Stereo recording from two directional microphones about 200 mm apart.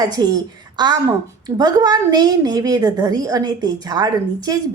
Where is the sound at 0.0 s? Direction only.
20° right (ahead or behind).